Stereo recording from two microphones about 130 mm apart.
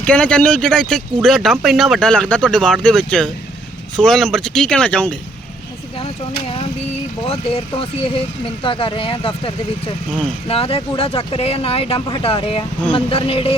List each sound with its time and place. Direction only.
0.0 s speech: 10° left (ahead or behind)
6.0 s speech: 50° left (ahead or behind)